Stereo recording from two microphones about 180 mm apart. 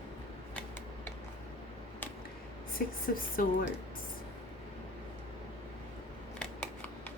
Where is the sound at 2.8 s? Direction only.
55° left (ahead or behind).